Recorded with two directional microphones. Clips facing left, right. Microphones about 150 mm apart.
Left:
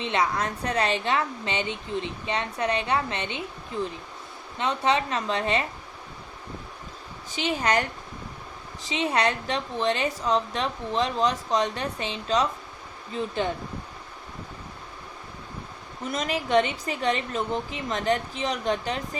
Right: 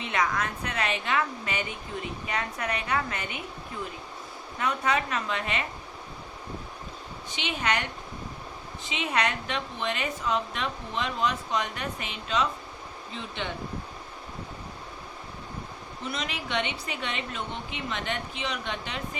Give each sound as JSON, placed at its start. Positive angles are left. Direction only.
{"t": 0.0, "sound": "a woman's voice", "side_deg": 30}
{"t": 4.5, "sound": "a woman's voice", "side_deg": 25}
{"t": 7.3, "sound": "a woman's voice", "side_deg": 35}
{"t": 8.9, "sound": "a woman's voice", "side_deg": 35}
{"t": 16.1, "sound": "a woman's voice", "side_deg": 45}